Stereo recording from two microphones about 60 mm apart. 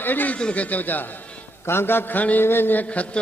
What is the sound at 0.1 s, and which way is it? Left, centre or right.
Music, left.